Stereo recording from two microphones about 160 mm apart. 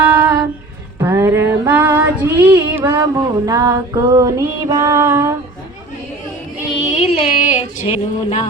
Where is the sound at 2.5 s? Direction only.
20° right (ahead or behind).